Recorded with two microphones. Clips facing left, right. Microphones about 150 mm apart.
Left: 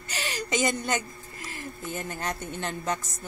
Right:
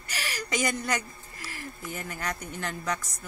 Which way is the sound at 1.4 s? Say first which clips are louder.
Left 2 dB; 20° left (ahead or behind).